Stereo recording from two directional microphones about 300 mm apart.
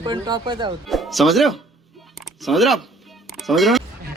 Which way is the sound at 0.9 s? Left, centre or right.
Centre.